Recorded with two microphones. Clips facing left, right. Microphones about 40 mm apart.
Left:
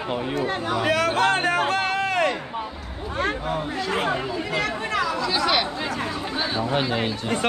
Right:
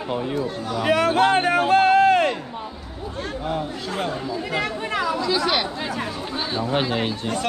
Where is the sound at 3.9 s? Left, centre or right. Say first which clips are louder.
Left 2 dB; left.